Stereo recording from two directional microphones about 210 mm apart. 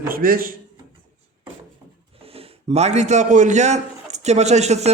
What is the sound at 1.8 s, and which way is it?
Wood, 15° right (ahead or behind).